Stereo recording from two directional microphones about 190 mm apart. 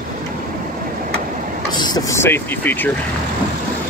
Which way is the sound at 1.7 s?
20° left (ahead or behind).